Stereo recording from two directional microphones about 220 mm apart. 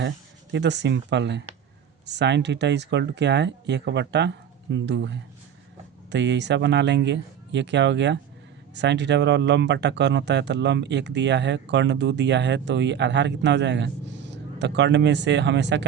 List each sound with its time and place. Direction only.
0.5 s speech: 50° right (ahead or behind)